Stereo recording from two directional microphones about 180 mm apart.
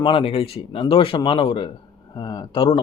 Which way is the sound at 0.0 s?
30° left (ahead or behind).